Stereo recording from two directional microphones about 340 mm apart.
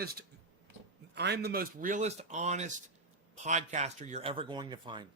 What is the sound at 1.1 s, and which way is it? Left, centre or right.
A man's voice, right.